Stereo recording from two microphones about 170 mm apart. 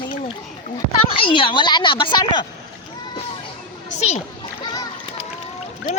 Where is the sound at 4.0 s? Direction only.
40° left (ahead or behind).